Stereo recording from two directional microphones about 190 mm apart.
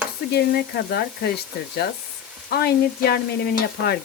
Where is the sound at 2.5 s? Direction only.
55° left (ahead or behind).